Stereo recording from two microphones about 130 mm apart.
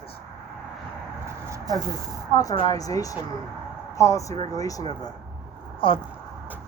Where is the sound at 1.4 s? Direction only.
25° right (ahead or behind).